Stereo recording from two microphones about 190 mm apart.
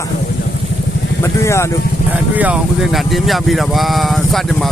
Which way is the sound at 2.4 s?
5° right (ahead or behind).